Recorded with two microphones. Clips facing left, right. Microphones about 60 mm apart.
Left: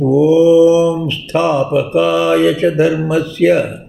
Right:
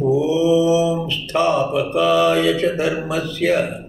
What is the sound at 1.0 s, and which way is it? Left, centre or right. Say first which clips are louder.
A man's voice: left 4 dB; left.